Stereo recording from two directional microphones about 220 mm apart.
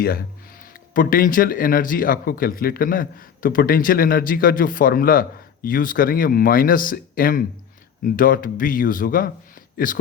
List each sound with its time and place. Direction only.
0.0 s speech: 45° left (ahead or behind)